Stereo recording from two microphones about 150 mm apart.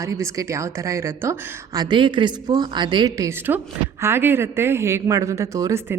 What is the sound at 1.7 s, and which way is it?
Speech, 30° right (ahead or behind).